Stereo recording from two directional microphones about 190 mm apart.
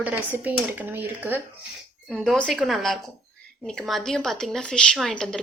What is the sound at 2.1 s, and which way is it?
Speech, centre (ahead or behind).